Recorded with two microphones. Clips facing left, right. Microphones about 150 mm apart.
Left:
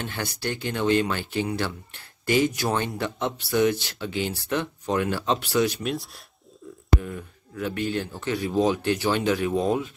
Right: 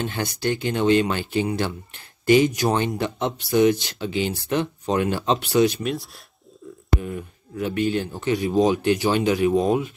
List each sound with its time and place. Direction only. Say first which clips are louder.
0.0 s speech: right 5 dB; 20° right (ahead or behind)
5.8 s speech: right 2 dB; centre (ahead or behind)
7.0 s speech: right 4 dB; 20° right (ahead or behind)